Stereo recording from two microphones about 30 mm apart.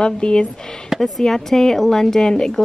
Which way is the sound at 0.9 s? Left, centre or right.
Centre.